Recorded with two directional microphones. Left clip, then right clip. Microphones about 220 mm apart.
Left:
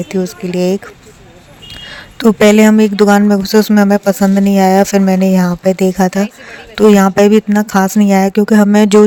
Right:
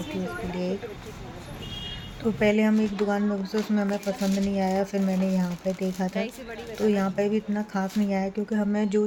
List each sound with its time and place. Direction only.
0.5 s speech: 50° left (ahead or behind)
2.1 s speech: 50° left (ahead or behind)